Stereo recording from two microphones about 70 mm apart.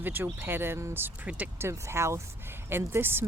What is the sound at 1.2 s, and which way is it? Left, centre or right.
Speech, right.